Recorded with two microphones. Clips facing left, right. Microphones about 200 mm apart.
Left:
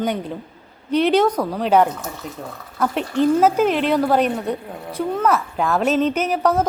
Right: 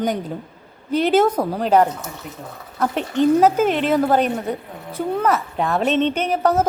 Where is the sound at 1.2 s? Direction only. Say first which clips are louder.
Even; 25° right (ahead or behind).